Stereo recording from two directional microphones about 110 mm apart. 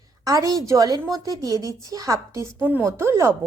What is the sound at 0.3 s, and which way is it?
A woman's voice, 30° right (ahead or behind).